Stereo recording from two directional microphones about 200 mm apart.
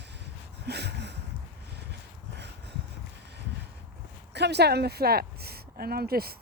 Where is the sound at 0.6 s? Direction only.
55° right (ahead or behind).